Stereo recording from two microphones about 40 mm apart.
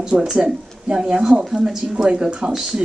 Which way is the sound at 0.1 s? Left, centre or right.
Right.